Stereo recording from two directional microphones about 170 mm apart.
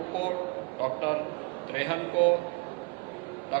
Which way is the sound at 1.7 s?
30° left (ahead or behind).